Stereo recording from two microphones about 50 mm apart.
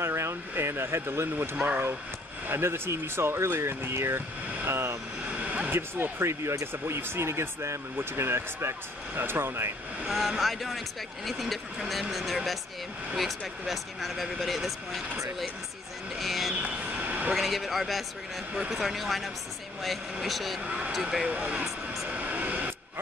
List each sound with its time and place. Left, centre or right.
0.0 s a sound: right
1.4 s speech: right
5.3 s vehicle: right
5.7 s speech: right
6.7 s speech: right
10.0 s speech: centre
13.7 s speech: centre
16.2 s a sound: centre
16.6 s vehicle: right
17.4 s speech: centre
20.6 s speech: right
22.1 s a sound: right